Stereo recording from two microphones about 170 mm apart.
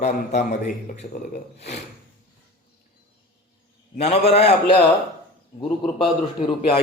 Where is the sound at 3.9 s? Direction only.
35° left (ahead or behind).